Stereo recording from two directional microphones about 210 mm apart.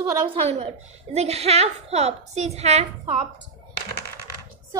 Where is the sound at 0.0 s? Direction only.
25° right (ahead or behind).